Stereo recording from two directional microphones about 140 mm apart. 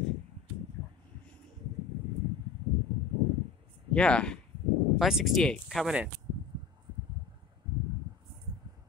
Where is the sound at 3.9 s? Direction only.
5° left (ahead or behind).